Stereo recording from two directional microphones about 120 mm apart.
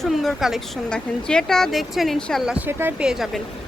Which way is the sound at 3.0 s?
Centre (ahead or behind).